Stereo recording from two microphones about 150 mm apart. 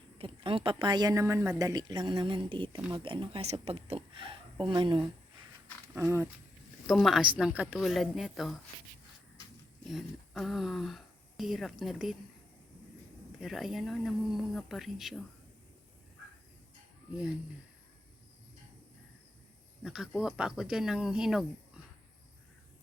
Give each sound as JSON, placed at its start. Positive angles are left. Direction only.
{"t": 0.2, "sound": "a woman's voice", "side_deg": -35}
{"t": 5.9, "sound": "speech", "side_deg": -20}
{"t": 6.8, "sound": "speech", "side_deg": 0}
{"t": 9.8, "sound": "speech", "side_deg": 0}
{"t": 13.4, "sound": "speech", "side_deg": 0}
{"t": 19.8, "sound": "speech", "side_deg": -5}